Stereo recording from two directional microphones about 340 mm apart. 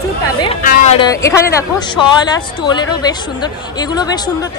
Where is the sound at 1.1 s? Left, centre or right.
Centre.